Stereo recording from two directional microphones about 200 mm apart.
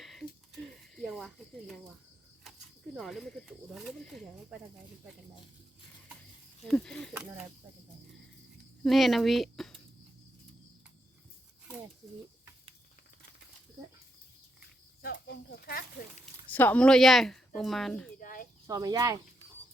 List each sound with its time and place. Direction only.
0.0 s a sound: centre (ahead or behind)
2.4 s speech: centre (ahead or behind)
6.7 s speech: 5° left (ahead or behind)
7.1 s speech: 10° right (ahead or behind)
8.8 s speech: centre (ahead or behind)
15.0 s speech: 50° left (ahead or behind)
16.5 s speech: 10° left (ahead or behind)
18.2 s a sound: 45° left (ahead or behind)
18.7 s speech: 20° right (ahead or behind)